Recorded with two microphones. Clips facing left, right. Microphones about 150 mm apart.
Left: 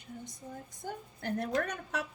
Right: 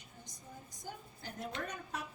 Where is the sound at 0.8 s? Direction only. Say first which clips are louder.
Left 8 dB; 60° left (ahead or behind).